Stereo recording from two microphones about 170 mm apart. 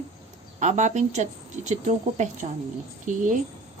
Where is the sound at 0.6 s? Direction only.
45° right (ahead or behind).